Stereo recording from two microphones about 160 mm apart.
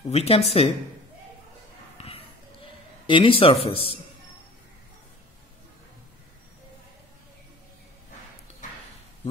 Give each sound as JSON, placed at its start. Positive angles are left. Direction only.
{"t": 0.1, "sound": "speech", "side_deg": 40}
{"t": 2.0, "sound": "a sound", "side_deg": 40}
{"t": 3.1, "sound": "speech", "side_deg": 35}